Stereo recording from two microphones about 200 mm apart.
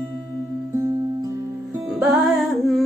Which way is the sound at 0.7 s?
15° right (ahead or behind).